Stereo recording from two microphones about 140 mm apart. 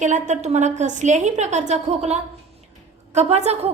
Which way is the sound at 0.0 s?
60° right (ahead or behind).